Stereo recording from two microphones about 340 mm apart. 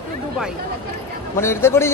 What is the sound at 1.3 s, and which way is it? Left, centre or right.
Speech, centre.